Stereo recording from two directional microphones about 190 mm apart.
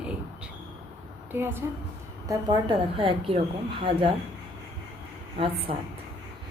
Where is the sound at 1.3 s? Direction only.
10° right (ahead or behind).